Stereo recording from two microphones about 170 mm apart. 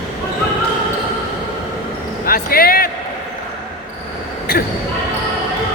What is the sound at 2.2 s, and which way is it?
Basketball bounce, 60° left (ahead or behind).